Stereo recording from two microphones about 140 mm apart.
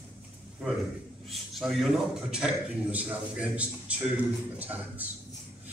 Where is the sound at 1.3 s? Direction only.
Centre (ahead or behind).